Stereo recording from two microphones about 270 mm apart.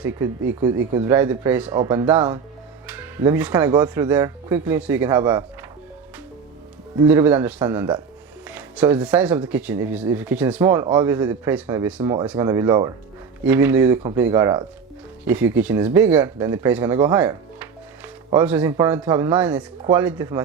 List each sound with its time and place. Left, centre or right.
1.0 s speech: centre
7.0 s speech: centre